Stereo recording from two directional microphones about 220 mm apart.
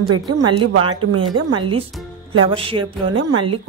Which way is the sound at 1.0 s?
80° right.